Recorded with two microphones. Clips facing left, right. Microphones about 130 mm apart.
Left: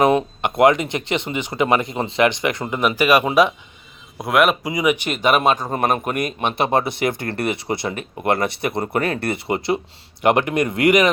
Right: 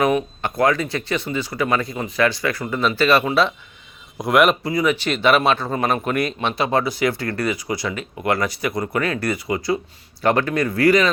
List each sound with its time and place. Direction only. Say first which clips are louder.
0.0 s a sound: left 3 dB; 30° left (ahead or behind)
0.4 s speech: left 5 dB; 20° left (ahead or behind)
4.2 s speech: right 1 dB; centre (ahead or behind)
4.6 s speech: even; 15° left (ahead or behind)
5.7 s speech: left 1 dB; 45° left (ahead or behind)
6.1 s speech: right 1 dB; 15° left (ahead or behind)